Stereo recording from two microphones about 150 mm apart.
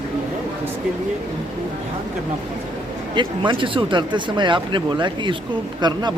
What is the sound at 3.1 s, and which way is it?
A man's voice, 35° right (ahead or behind).